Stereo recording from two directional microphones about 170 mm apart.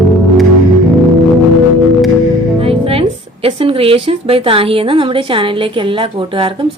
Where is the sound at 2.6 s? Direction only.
35° right (ahead or behind).